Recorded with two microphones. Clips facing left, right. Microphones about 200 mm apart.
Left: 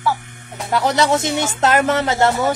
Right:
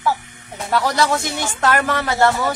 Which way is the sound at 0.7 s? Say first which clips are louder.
Left 2 dB; 20° left (ahead or behind).